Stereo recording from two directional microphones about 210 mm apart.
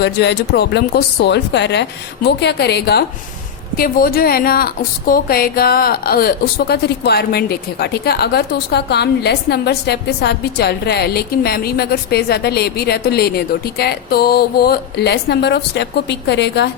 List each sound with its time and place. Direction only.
0.0 s a woman's voice: 50° left (ahead or behind)